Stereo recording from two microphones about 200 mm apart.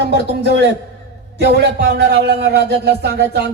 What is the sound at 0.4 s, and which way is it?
A man's voice, 60° right (ahead or behind).